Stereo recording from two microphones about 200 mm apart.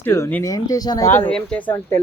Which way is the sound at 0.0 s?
10° left (ahead or behind).